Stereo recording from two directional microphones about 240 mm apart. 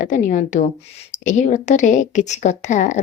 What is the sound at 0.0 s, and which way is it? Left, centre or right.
A woman's voice, left.